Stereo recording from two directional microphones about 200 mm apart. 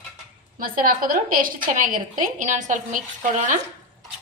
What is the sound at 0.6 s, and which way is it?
A woman's voice, 45° right (ahead or behind).